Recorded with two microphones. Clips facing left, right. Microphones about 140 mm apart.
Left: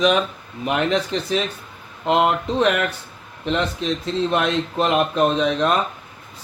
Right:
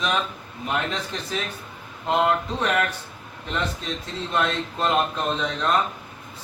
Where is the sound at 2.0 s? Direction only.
90° left.